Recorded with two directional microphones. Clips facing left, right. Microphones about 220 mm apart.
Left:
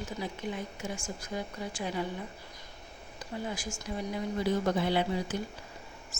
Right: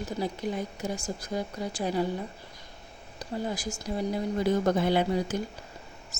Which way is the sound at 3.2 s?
40° right (ahead or behind).